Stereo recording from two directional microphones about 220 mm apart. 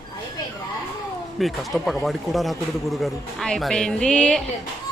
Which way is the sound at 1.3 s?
Centre (ahead or behind).